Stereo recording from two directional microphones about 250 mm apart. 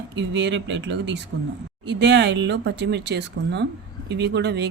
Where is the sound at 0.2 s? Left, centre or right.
Right.